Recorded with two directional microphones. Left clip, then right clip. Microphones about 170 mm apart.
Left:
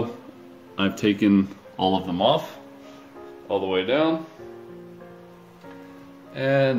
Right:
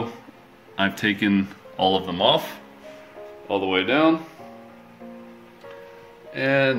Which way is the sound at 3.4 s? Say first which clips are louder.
Right 1 dB; 15° right (ahead or behind).